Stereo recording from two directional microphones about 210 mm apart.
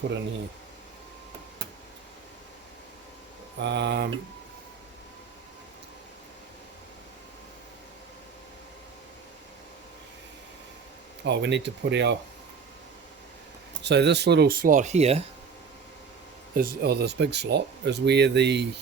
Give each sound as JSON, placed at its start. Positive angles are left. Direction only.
{"t": 3.6, "sound": "speech", "side_deg": -55}
{"t": 11.2, "sound": "speech", "side_deg": -55}
{"t": 13.8, "sound": "speech", "side_deg": -55}
{"t": 16.6, "sound": "speech", "side_deg": -50}